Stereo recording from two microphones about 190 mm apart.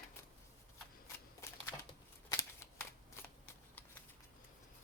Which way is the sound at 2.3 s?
15° left (ahead or behind).